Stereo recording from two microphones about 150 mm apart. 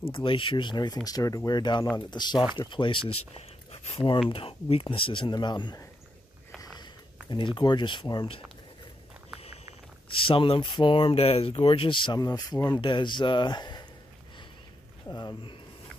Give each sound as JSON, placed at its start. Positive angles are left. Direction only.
{"t": 0.0, "sound": "speech", "side_deg": 35}
{"t": 7.5, "sound": "speech", "side_deg": 30}
{"t": 10.0, "sound": "speech", "side_deg": 35}
{"t": 15.0, "sound": "speech", "side_deg": 30}